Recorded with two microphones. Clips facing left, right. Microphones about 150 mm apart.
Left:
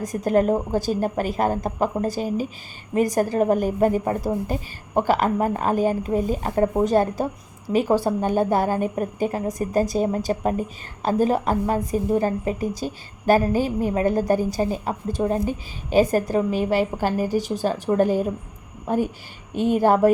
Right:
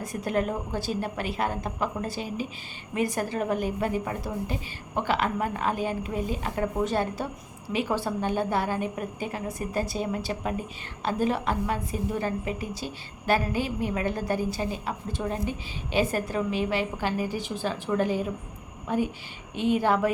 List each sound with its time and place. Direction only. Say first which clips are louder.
0.0 s a woman's voice: left 8 dB; 40° left (ahead or behind)